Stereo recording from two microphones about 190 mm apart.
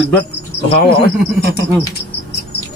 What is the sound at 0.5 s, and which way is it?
Insect, 30° left (ahead or behind).